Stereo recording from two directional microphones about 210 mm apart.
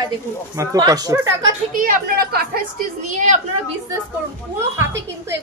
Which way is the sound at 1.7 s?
45° right (ahead or behind).